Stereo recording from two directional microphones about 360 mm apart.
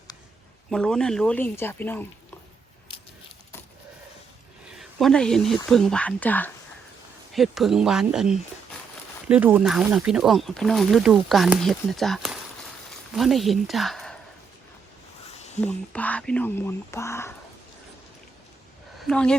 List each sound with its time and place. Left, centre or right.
0.7 s speech: centre
4.7 s speech: centre
15.3 s a sound: centre
15.6 s speech: centre
18.9 s speech: centre